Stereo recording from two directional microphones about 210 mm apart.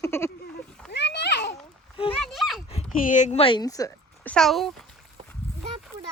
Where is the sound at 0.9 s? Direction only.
55° left (ahead or behind).